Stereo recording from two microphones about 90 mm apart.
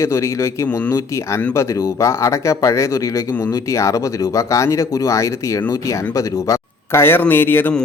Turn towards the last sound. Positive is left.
turn(degrees=25)  # may be behind; listen again after turning